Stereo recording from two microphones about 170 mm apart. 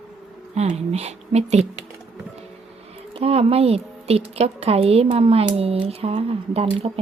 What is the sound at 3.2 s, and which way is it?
A woman's voice, 35° right (ahead or behind).